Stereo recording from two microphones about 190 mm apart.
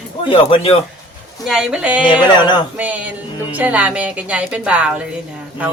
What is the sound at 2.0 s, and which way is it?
Speech, 25° left (ahead or behind).